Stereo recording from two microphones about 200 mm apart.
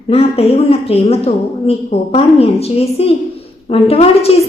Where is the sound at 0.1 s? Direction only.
30° left (ahead or behind).